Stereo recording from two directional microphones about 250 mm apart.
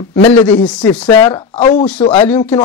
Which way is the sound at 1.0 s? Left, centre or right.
Centre.